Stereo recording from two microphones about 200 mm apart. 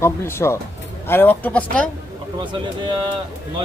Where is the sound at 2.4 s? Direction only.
25° right (ahead or behind).